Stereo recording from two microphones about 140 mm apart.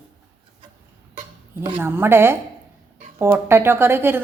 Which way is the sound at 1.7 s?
15° right (ahead or behind).